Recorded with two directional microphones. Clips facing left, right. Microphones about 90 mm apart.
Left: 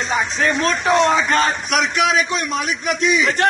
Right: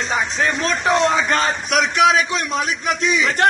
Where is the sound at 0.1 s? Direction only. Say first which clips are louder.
Left 2 dB; 30° right (ahead or behind).